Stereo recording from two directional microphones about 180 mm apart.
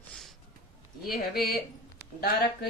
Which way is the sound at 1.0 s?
55° left (ahead or behind).